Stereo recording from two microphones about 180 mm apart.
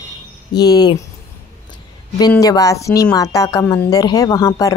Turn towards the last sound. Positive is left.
turn(degrees=20)  # may be behind; listen again after turning